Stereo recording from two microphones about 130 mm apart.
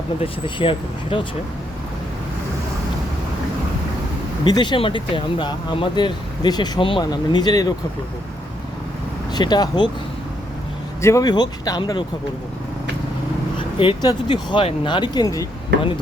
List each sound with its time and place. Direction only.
0.2 s speech: 45° left (ahead or behind)
4.4 s speech: 35° left (ahead or behind)
9.3 s speech: 35° left (ahead or behind)
11.0 s speech: 20° left (ahead or behind)
13.7 s speech: 35° left (ahead or behind)